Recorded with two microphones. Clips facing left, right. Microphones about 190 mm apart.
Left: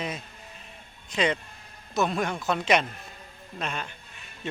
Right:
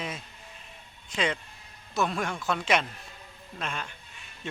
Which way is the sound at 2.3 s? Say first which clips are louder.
Left 3 dB; 20° left (ahead or behind).